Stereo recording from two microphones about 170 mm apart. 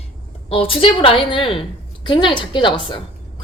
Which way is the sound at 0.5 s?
35° left (ahead or behind).